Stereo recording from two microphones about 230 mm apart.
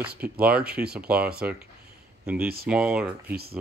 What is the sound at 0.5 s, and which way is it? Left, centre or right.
Speech, right.